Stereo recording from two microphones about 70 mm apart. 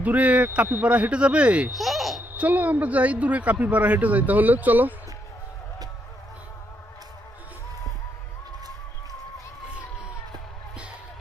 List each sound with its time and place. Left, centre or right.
0.0 s speech: right
1.7 s baby laughter: centre
2.3 s speech: right